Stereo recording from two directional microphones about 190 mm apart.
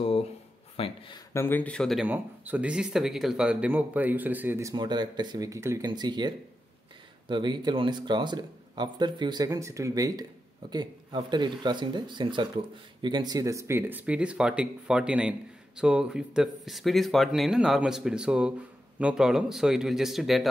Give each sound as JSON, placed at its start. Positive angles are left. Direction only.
{"t": 0.7, "sound": "speech", "side_deg": 30}
{"t": 1.3, "sound": "speech", "side_deg": 10}
{"t": 2.0, "sound": "speech", "side_deg": -10}